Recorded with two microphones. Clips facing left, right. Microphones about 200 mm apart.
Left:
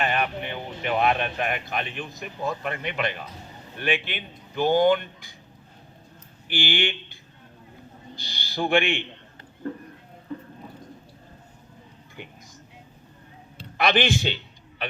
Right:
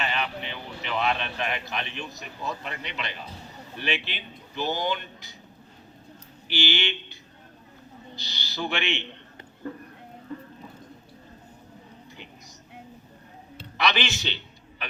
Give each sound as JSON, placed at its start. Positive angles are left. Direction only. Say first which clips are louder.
{"t": 0.0, "sound": "speech", "louder": "left 4 dB", "side_deg": 50}
{"t": 6.5, "sound": "a man's voice", "louder": "left 2 dB", "side_deg": 50}
{"t": 13.7, "sound": "speech", "louder": "left 5 dB", "side_deg": 50}